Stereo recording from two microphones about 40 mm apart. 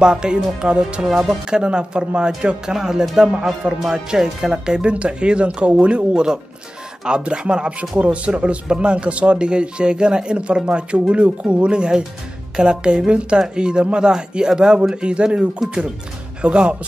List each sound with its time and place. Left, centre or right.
0.0 s speech: right
1.0 s speech: centre